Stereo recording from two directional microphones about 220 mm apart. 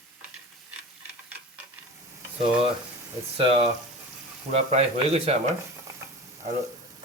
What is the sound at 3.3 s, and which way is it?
Speech, 25° right (ahead or behind).